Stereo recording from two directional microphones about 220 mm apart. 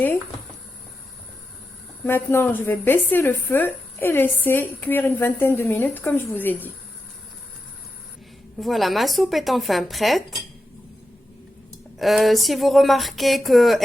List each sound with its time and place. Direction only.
2.0 s a woman's voice: 10° left (ahead or behind)
8.5 s speech: centre (ahead or behind)
11.9 s speech: centre (ahead or behind)